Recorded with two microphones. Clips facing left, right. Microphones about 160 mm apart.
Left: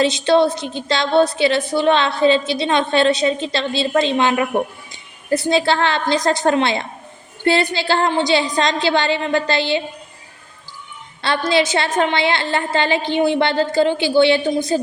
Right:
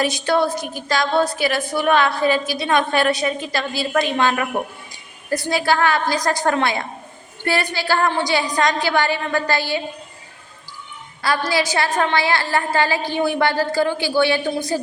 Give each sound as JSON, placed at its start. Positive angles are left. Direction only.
{"t": 0.0, "sound": "a woman's voice", "side_deg": 25}
{"t": 11.2, "sound": "a woman's voice", "side_deg": 25}